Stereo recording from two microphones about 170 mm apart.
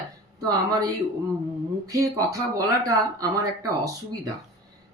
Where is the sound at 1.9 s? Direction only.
20° right (ahead or behind).